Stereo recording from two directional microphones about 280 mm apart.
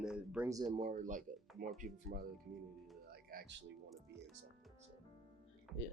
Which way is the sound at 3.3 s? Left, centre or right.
Right.